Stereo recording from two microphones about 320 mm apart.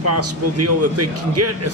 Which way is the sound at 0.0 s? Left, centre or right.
Right.